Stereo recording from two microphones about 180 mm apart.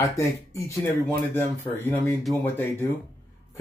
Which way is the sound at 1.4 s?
10° left (ahead or behind).